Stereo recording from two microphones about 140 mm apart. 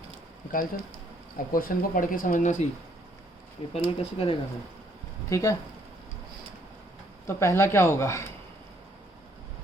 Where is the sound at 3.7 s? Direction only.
45° left (ahead or behind).